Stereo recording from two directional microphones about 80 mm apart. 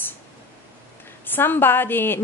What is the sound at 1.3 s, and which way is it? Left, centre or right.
Speech, left.